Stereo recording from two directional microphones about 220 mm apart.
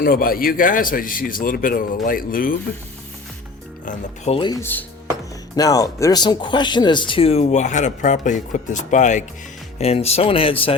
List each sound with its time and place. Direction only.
0.0 s speech: 40° left (ahead or behind)
3.8 s a man's voice: 30° left (ahead or behind)